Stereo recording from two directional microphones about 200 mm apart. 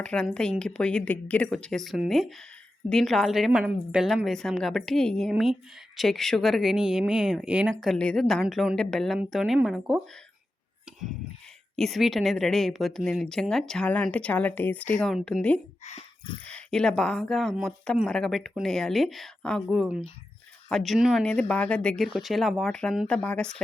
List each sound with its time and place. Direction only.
0.0 s speech: 5° left (ahead or behind)
11.8 s speech: centre (ahead or behind)
15.8 s a sound: 30° left (ahead or behind)
16.5 s speech: 5° left (ahead or behind)